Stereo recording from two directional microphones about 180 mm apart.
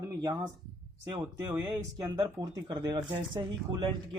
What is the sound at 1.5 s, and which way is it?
Speech, 20° right (ahead or behind).